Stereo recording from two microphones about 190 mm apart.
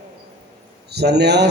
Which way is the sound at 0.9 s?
60° right (ahead or behind).